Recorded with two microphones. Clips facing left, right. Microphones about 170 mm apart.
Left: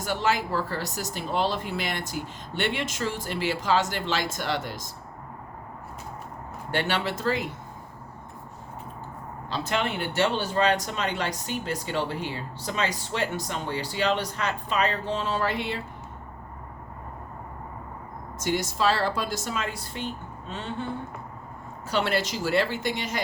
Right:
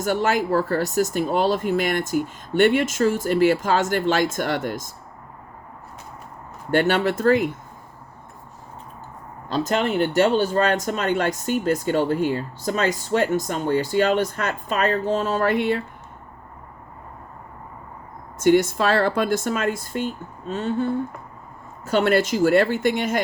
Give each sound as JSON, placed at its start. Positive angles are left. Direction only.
{"t": 0.0, "sound": "speech", "side_deg": -50}
{"t": 6.7, "sound": "speech", "side_deg": -50}
{"t": 9.5, "sound": "speech", "side_deg": -45}
{"t": 18.3, "sound": "speech", "side_deg": -55}